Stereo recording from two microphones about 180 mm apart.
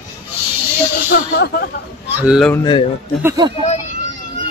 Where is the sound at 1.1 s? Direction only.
70° left (ahead or behind).